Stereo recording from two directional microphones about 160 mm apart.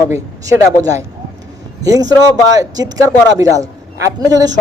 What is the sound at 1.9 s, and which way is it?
A man's voice, 20° right (ahead or behind).